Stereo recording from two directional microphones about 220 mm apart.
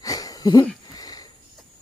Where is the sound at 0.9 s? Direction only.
15° left (ahead or behind).